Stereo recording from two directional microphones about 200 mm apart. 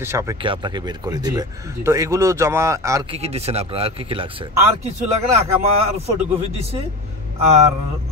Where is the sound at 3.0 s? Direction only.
30° right (ahead or behind).